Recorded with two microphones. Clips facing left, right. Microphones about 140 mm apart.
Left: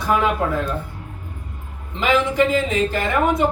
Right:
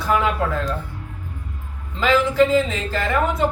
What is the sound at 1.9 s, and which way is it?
Speech, 15° left (ahead or behind).